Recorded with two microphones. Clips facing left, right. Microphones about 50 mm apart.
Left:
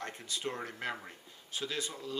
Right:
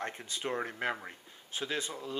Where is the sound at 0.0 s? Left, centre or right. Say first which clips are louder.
Right 1 dB; right.